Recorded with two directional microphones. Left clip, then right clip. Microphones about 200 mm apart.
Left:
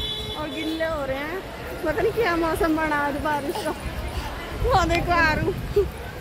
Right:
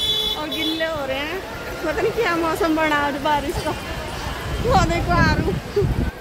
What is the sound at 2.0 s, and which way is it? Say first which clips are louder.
Speech: right 2 dB; 5° right (ahead or behind).